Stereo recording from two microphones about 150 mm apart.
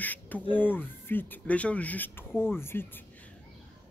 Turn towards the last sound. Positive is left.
turn(degrees=10)  # may be behind; listen again after turning